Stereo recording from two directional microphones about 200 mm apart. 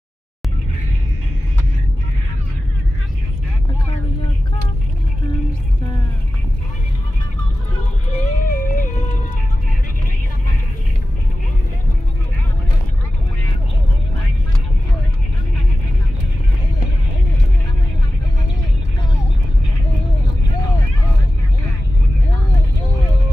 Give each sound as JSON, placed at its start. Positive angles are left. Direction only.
{"t": 8.2, "sound": "music", "side_deg": 40}